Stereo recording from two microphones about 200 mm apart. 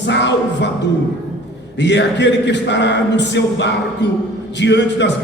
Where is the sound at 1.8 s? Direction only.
60° left (ahead or behind).